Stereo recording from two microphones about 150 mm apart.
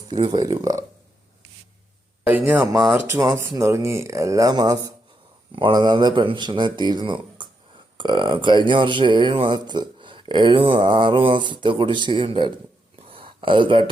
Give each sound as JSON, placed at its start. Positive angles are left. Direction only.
{"t": 0.1, "sound": "speech", "side_deg": -30}
{"t": 2.2, "sound": "speech", "side_deg": -15}
{"t": 13.1, "sound": "a sound", "side_deg": -35}